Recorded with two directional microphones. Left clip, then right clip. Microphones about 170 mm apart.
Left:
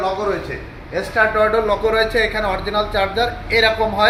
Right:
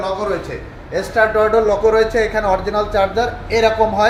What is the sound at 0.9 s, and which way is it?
A man's voice, 85° right.